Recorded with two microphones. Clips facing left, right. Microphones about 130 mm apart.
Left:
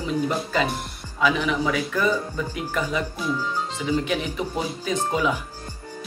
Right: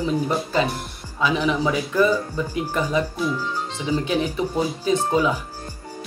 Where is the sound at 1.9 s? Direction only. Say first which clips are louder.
Right 4 dB; 10° right (ahead or behind).